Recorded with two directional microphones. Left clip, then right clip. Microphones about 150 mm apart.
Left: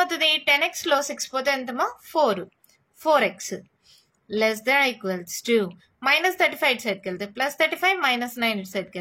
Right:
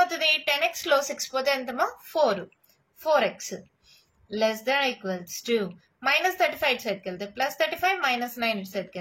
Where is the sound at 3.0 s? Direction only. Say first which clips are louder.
Left 3 dB; 50° left (ahead or behind).